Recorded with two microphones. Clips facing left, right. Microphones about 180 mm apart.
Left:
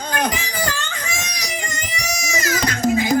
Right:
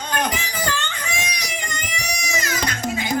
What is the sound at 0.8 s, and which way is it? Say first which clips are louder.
Music: even; 45° left (ahead or behind).